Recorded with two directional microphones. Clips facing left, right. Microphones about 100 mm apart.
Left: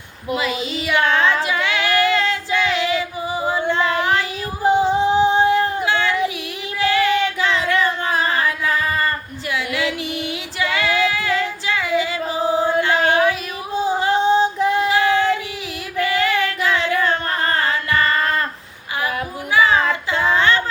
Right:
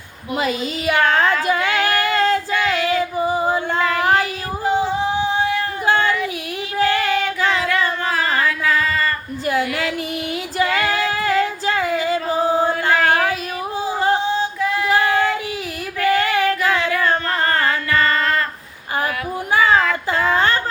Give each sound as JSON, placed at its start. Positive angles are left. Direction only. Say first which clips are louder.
{"t": 0.3, "sound": "speech", "louder": "right 2 dB", "side_deg": -40}
{"t": 1.5, "sound": "female singing", "louder": "right 2 dB", "side_deg": -45}
{"t": 4.0, "sound": "child singing", "louder": "right 3 dB", "side_deg": -40}
{"t": 4.6, "sound": "singing", "louder": "left 3 dB", "side_deg": 25}
{"t": 5.8, "sound": "child singing", "louder": "right 1 dB", "side_deg": -40}
{"t": 7.6, "sound": "a sound", "louder": "left 1 dB", "side_deg": 25}
{"t": 9.5, "sound": "music", "louder": "right 4 dB", "side_deg": -40}
{"t": 10.6, "sound": "female singing", "louder": "even", "side_deg": -40}
{"t": 12.9, "sound": "a sound", "louder": "even", "side_deg": 20}
{"t": 14.8, "sound": "child singing", "louder": "even", "side_deg": -40}
{"t": 16.1, "sound": "female singing", "louder": "right 1 dB", "side_deg": -40}
{"t": 17.9, "sound": "female singing", "louder": "even", "side_deg": 25}
{"t": 19.5, "sound": "a sound", "louder": "even", "side_deg": -40}